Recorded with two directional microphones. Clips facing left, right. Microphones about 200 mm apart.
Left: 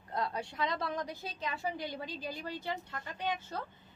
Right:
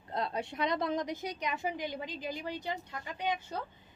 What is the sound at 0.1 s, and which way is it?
A woman's voice, 25° right (ahead or behind).